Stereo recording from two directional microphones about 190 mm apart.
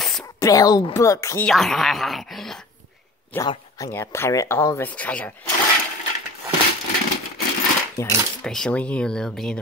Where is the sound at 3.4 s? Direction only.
20° left (ahead or behind).